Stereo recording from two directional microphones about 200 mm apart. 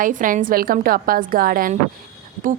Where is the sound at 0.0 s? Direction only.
40° right (ahead or behind).